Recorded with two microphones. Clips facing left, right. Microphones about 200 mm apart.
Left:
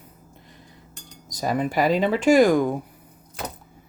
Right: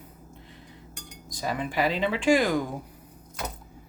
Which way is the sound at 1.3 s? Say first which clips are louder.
Left 6 dB; 45° left (ahead or behind).